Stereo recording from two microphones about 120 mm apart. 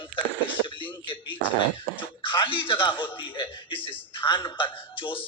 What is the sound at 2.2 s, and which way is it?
A man's voice, 45° left (ahead or behind).